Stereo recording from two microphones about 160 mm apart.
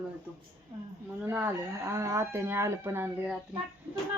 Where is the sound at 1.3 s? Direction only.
15° right (ahead or behind).